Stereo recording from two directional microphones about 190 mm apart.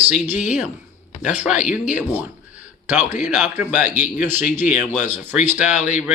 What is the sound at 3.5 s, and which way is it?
Speech, 10° right (ahead or behind).